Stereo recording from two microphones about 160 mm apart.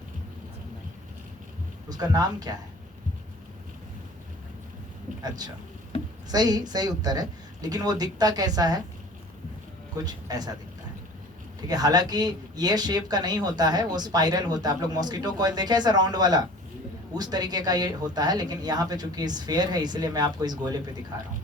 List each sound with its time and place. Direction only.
1.9 s speech: 25° right (ahead or behind)
6.3 s speech: 25° right (ahead or behind)
10.0 s speech: 25° right (ahead or behind)
11.7 s speech: 25° right (ahead or behind)